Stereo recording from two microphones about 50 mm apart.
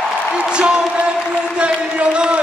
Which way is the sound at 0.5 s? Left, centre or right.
Centre.